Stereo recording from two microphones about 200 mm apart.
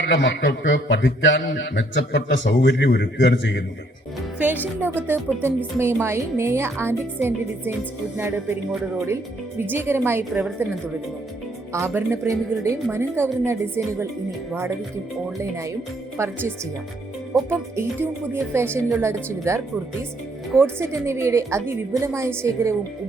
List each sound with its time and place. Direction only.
0.1 s a man's voice: 60° left (ahead or behind)
4.4 s a woman's voice: 10° right (ahead or behind)
9.6 s a woman's voice: 10° right (ahead or behind)
11.7 s a woman's voice: 15° right (ahead or behind)
16.1 s a woman's voice: 10° right (ahead or behind)